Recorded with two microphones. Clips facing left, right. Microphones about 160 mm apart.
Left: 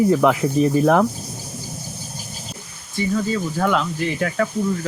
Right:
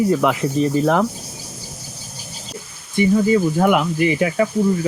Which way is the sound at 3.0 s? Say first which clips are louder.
Right 6 dB; 15° right (ahead or behind).